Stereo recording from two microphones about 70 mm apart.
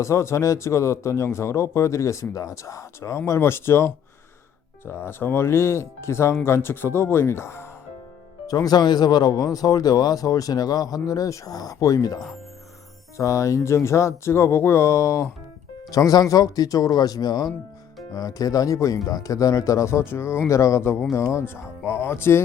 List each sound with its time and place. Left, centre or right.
0.0 s speech: left
8.4 s speech: left
13.1 s speech: left
15.9 s speech: left
18.1 s speech: left